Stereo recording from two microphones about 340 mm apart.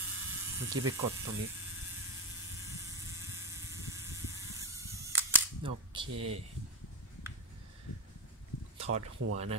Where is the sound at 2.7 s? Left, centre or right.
Centre.